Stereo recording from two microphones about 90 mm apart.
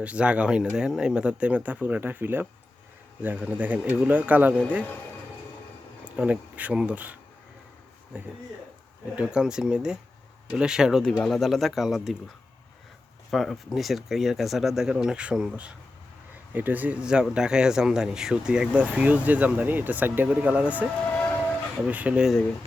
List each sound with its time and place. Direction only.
0.0 s speech: 15° right (ahead or behind)
6.1 s speech: 15° right (ahead or behind)
13.3 s speech: centre (ahead or behind); by 20.8 s 15° right (ahead or behind)
21.1 s train: 15° left (ahead or behind)
21.8 s speech: 15° right (ahead or behind)